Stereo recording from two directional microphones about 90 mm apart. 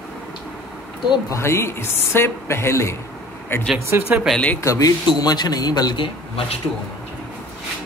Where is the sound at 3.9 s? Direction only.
25° right (ahead or behind).